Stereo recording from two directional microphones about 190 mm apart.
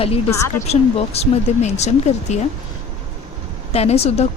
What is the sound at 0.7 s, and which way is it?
Speech, 35° left (ahead or behind).